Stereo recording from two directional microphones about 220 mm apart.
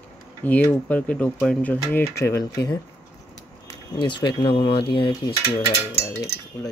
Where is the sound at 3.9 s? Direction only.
20° left (ahead or behind).